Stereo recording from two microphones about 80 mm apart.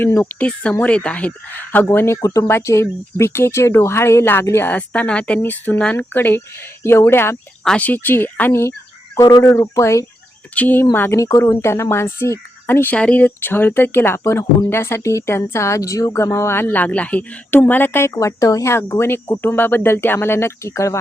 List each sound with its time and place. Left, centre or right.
0.0 s speech: left
0.3 s speech: centre
2.2 s speech: left
2.5 s speech: left
4.7 s a woman's voice: centre
9.7 s speech: left
10.5 s speech: left
11.2 s speech: left